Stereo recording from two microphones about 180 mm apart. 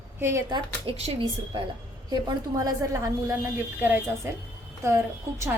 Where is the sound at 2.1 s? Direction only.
20° right (ahead or behind).